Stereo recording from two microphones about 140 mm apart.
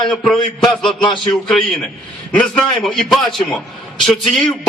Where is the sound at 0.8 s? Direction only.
35° left (ahead or behind).